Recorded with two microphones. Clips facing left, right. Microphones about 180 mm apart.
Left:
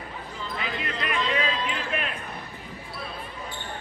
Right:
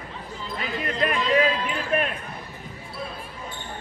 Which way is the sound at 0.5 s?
40° right (ahead or behind).